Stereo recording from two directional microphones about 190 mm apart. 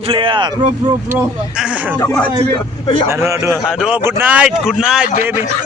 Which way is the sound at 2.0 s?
10° left (ahead or behind).